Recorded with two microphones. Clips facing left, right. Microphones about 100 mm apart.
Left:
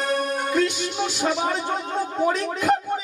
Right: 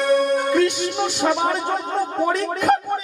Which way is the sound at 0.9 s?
55° right (ahead or behind).